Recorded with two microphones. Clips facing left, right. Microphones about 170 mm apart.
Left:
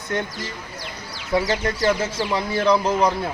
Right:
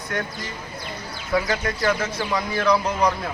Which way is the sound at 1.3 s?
30° left (ahead or behind).